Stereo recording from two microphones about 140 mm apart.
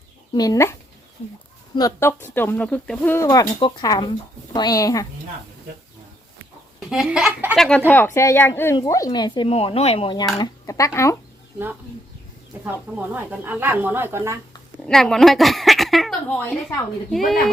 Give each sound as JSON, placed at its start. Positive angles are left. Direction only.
{"t": 0.3, "sound": "speech", "side_deg": 25}
{"t": 2.0, "sound": "speech", "side_deg": 15}
{"t": 6.7, "sound": "speech", "side_deg": 0}
{"t": 7.9, "sound": "speech", "side_deg": 15}
{"t": 8.7, "sound": "speech", "side_deg": 25}
{"t": 9.5, "sound": "speech", "side_deg": 45}
{"t": 10.2, "sound": "speech", "side_deg": 30}
{"t": 12.6, "sound": "speech", "side_deg": -10}
{"t": 14.8, "sound": "speech", "side_deg": 5}
{"t": 16.4, "sound": "speech", "side_deg": 10}
{"t": 17.1, "sound": "speech", "side_deg": 0}